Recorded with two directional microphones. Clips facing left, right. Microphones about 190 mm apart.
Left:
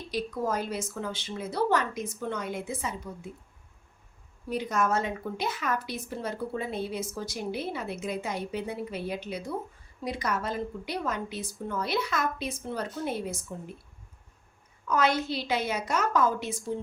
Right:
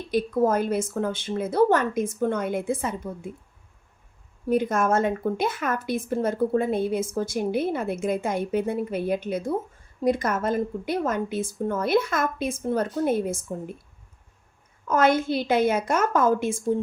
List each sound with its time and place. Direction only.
0.1 s a woman's voice: 50° right (ahead or behind)
4.4 s a woman's voice: 50° right (ahead or behind)
14.8 s a woman's voice: 50° right (ahead or behind)